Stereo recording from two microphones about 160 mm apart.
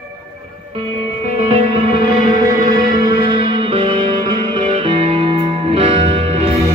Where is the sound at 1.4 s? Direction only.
40° right (ahead or behind).